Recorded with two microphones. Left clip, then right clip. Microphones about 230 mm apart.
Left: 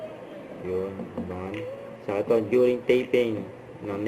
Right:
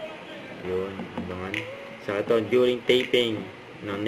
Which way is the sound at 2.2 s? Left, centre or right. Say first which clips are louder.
Even; right.